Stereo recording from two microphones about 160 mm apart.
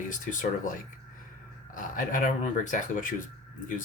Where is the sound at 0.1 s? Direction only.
55° left (ahead or behind).